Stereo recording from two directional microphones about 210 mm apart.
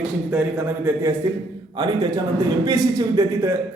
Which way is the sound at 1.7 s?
20° right (ahead or behind).